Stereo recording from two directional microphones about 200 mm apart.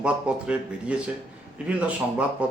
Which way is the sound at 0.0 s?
5° right (ahead or behind).